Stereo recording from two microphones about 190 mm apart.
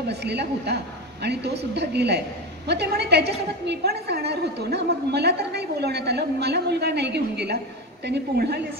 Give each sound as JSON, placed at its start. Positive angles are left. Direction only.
{"t": 0.1, "sound": "a woman's voice", "side_deg": -60}